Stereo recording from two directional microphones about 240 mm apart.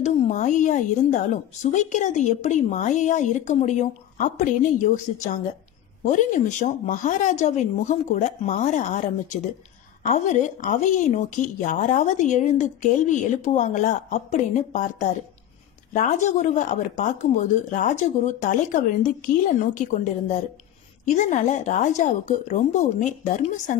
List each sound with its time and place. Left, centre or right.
0.0 s a woman's voice: left